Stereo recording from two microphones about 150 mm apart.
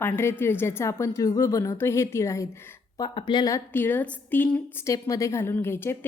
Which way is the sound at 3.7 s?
10° left (ahead or behind).